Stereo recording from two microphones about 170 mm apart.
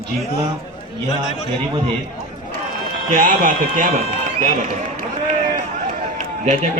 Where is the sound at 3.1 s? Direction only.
50° right (ahead or behind).